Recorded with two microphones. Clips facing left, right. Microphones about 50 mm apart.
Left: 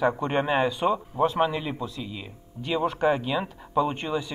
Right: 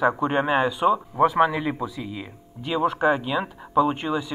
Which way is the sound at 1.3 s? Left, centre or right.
Right.